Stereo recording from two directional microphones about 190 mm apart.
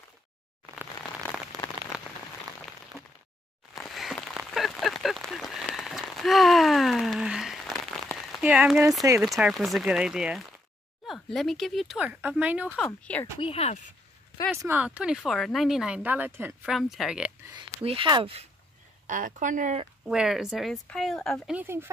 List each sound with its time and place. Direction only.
1.6 s rain on surface: 10° left (ahead or behind)
3.7 s a sound: centre (ahead or behind)
8.2 s rain on surface: 5° right (ahead or behind)
9.2 s speech: centre (ahead or behind)
12.7 s speech: 5° left (ahead or behind)
13.4 s speech: 30° left (ahead or behind)
14.6 s speech: 10° right (ahead or behind)
17.6 s speech: 25° right (ahead or behind)
19.0 s speech: 45° right (ahead or behind)
20.1 s speech: 5° right (ahead or behind)